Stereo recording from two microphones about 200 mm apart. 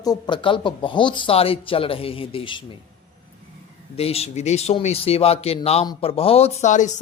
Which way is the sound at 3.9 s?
30° left (ahead or behind).